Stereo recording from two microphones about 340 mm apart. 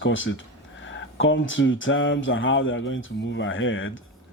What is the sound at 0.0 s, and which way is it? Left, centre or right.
Speech, left.